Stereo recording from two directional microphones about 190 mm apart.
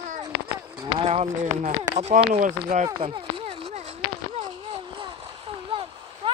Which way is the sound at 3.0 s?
30° right (ahead or behind).